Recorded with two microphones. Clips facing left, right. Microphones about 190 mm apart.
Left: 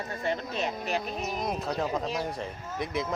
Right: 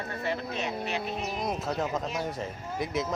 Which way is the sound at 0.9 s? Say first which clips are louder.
Left 1 dB; 40° left (ahead or behind).